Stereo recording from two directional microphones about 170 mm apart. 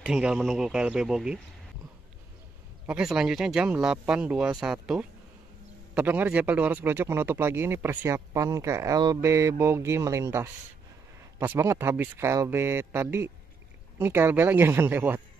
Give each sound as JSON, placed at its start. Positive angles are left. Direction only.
{"t": 0.0, "sound": "speech", "side_deg": -5}
{"t": 2.9, "sound": "speech", "side_deg": -5}